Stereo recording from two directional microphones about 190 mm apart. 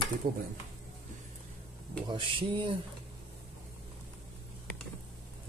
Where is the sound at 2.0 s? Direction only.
25° right (ahead or behind).